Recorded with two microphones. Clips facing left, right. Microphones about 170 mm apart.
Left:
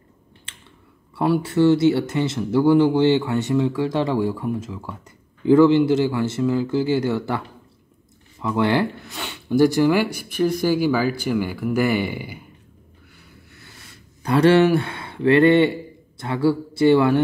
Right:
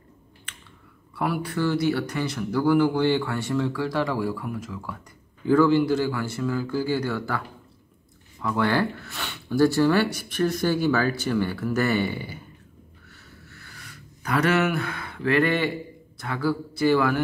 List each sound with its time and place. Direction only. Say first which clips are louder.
1.1 s speech: left 7 dB; 25° left (ahead or behind); by 12.4 s 10° left (ahead or behind)
13.5 s a sound: right 1 dB; 20° left (ahead or behind)
16.2 s speech: left 6 dB; 25° left (ahead or behind)